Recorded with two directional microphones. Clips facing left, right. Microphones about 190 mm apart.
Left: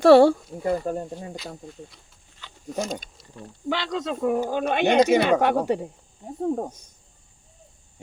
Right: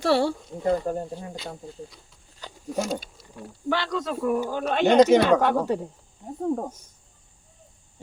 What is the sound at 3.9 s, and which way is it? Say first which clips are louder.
Speech: left 4 dB; 20° left (ahead or behind).